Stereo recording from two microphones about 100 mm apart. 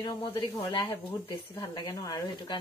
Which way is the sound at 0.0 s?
50° left (ahead or behind).